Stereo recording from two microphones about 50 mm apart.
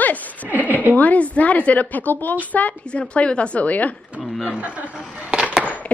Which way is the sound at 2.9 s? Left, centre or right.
Left.